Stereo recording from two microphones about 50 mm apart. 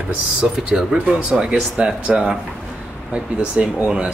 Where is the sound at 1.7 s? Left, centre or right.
Centre.